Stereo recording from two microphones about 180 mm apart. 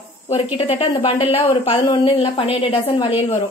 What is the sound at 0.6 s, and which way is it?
A woman's voice, 30° left (ahead or behind).